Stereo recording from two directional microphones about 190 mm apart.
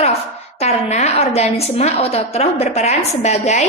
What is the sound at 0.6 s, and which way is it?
A woman's voice, 35° left (ahead or behind).